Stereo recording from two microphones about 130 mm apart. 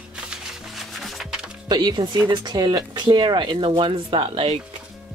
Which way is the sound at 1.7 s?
35° right (ahead or behind).